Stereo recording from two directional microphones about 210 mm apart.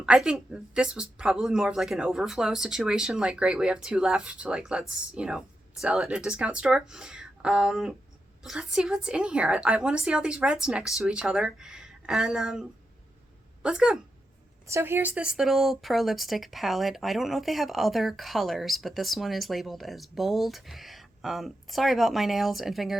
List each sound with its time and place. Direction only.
0.0 s speech: 5° right (ahead or behind)